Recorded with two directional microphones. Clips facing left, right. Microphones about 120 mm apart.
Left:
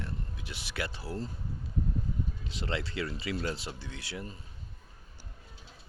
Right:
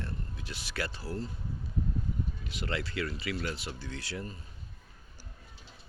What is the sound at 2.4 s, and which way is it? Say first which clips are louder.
Speech: even; 25° left (ahead or behind).